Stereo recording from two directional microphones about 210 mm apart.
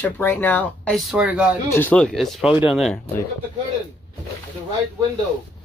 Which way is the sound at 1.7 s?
10° left (ahead or behind).